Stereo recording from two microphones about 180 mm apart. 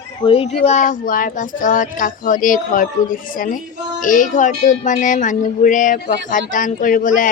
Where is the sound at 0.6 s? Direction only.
40° left (ahead or behind).